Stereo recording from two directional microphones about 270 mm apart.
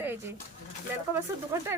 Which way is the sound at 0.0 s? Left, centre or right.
Centre.